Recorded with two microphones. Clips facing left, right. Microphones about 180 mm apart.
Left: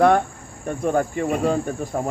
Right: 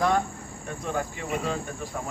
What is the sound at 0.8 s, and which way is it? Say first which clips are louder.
Cricket: left 10 dB; 50° left (ahead or behind).